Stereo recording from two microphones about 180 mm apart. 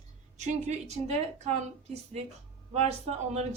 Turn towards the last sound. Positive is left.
turn(degrees=-40)  # may be behind; listen again after turning